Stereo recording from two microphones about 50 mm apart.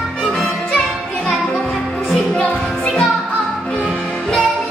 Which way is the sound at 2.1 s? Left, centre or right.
Centre.